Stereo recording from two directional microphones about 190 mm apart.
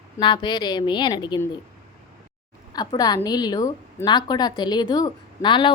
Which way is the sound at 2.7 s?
20° left (ahead or behind).